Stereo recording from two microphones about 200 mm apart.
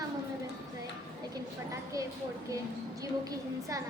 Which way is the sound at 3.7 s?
15° right (ahead or behind).